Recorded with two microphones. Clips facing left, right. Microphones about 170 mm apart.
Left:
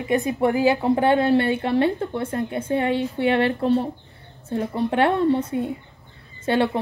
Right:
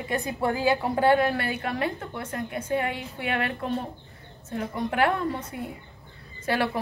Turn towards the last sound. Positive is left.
turn(degrees=25)  # may be behind; listen again after turning